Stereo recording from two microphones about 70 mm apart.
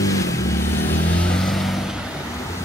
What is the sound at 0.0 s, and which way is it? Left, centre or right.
Vehicle, left.